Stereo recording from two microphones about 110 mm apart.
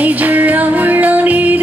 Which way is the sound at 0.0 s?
15° right (ahead or behind).